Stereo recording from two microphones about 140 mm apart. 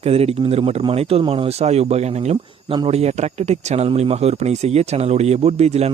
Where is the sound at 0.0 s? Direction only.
45° right (ahead or behind).